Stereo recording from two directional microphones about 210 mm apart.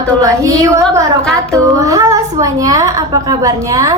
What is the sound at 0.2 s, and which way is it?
A woman's voice, 15° right (ahead or behind).